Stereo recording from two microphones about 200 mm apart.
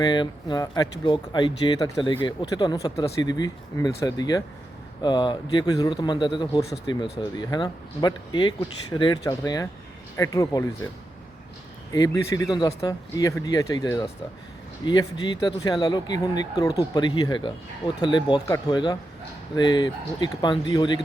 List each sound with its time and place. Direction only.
0.0 s speech: 20° left (ahead or behind)
11.9 s speech: 20° left (ahead or behind)